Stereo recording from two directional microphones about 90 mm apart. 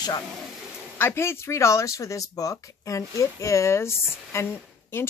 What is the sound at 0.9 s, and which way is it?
Speech, 25° left (ahead or behind).